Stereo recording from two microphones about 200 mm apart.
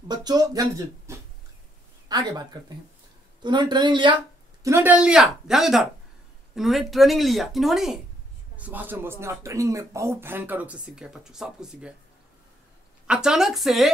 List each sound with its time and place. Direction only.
0.1 s speech: 20° right (ahead or behind)
3.4 s speech: 20° right (ahead or behind)
4.6 s a woman's voice: 10° right (ahead or behind)
13.0 s a woman's voice: 5° right (ahead or behind)